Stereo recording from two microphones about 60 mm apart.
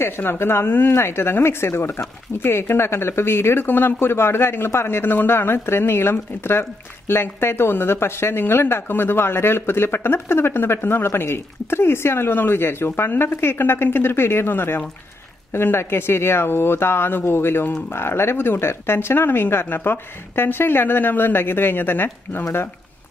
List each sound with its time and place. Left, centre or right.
0.0 s speech: left
0.9 s speech: left